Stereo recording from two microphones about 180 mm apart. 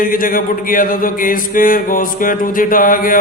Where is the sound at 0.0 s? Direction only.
50° left (ahead or behind).